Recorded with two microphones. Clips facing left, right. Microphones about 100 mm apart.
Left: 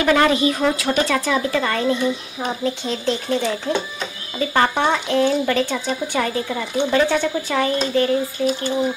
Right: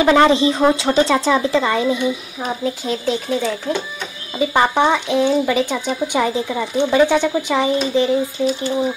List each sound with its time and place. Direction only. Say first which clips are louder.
0.0 s a woman's voice: right 4 dB; 25° right (ahead or behind); by 3.7 s centre (ahead or behind)
4.4 s speech: right 3 dB; 15° right (ahead or behind)